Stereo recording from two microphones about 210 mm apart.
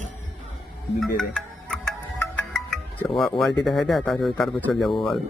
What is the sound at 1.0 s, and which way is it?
Speech, centre (ahead or behind).